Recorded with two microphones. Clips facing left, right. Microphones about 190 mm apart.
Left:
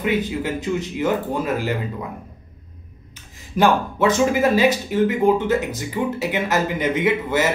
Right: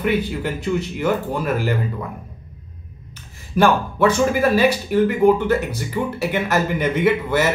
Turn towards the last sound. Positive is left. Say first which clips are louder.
# right 2 dB
turn(degrees=15)  # may be behind; listen again after turning